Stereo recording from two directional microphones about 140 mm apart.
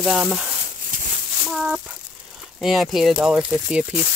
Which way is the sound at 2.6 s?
Centre (ahead or behind).